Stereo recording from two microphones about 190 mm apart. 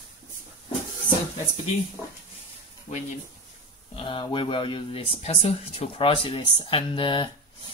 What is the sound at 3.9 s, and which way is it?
Speech, 25° left (ahead or behind).